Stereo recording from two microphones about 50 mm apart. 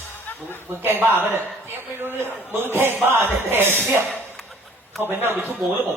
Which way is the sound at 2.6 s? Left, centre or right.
Right.